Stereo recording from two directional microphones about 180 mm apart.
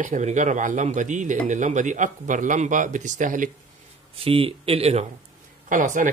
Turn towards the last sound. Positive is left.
turn(degrees=-45)  # may be behind; listen again after turning